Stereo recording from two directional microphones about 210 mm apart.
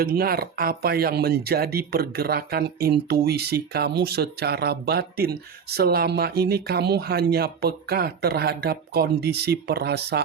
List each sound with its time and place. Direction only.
0.0 s speech: 45° right (ahead or behind)